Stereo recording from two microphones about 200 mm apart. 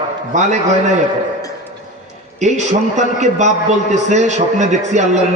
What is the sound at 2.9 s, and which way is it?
A man's voice, 35° right (ahead or behind).